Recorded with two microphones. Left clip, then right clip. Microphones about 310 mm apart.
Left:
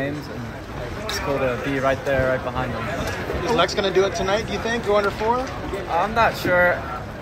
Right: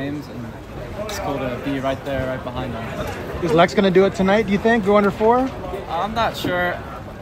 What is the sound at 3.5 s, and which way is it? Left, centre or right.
Speech, right.